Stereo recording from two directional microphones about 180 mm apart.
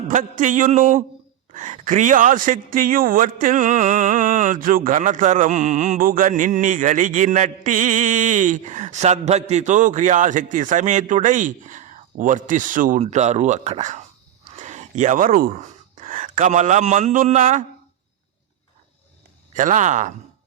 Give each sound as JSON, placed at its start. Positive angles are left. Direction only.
{"t": 0.1, "sound": "a man's voice", "side_deg": -45}
{"t": 19.5, "sound": "a man's voice", "side_deg": -45}